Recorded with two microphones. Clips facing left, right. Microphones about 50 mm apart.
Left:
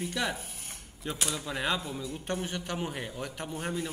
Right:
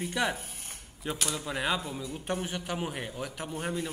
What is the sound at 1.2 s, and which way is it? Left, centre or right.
A man's voice, centre.